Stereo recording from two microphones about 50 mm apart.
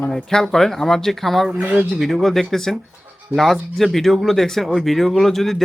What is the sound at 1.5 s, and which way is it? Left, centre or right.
Speech, right.